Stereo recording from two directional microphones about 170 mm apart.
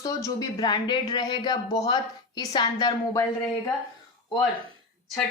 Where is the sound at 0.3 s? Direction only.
25° left (ahead or behind).